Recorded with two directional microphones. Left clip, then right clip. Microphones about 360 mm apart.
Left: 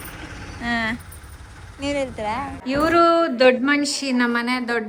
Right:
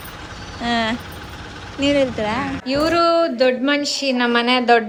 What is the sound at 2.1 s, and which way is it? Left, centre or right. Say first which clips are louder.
Speech: right 4 dB; right.